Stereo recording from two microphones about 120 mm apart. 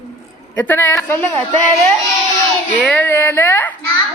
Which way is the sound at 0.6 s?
15° left (ahead or behind).